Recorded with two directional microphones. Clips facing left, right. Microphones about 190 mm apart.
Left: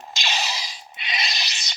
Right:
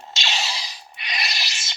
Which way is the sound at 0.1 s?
15° left (ahead or behind).